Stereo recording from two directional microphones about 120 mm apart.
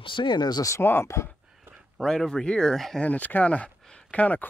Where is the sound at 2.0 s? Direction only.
5° left (ahead or behind).